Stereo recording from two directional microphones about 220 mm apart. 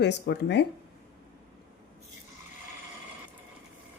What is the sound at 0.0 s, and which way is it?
Speech, 50° left (ahead or behind).